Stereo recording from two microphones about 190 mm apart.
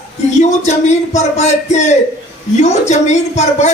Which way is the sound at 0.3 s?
35° left (ahead or behind).